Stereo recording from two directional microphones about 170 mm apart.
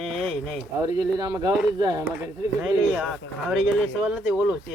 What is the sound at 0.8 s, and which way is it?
Speech, 20° right (ahead or behind).